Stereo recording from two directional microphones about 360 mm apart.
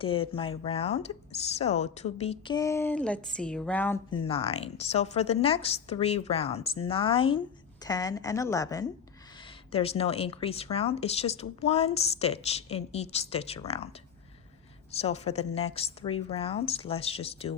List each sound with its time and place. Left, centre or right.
0.0 s speech: centre
14.9 s speech: centre